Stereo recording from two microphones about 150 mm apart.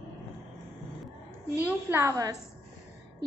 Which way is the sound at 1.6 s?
10° right (ahead or behind).